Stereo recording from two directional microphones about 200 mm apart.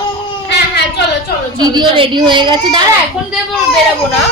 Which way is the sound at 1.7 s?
25° right (ahead or behind).